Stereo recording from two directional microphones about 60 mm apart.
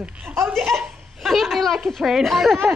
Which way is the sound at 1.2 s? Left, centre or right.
Centre.